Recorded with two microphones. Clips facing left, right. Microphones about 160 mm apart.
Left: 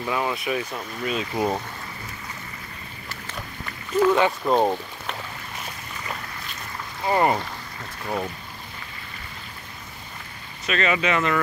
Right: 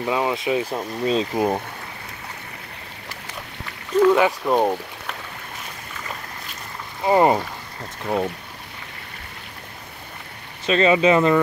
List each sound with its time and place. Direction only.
0.0 s speech: 20° right (ahead or behind)
1.3 s speech: 15° right (ahead or behind)
4.0 s speech: 5° right (ahead or behind)
7.1 s speech: 20° right (ahead or behind)
10.7 s speech: 30° right (ahead or behind)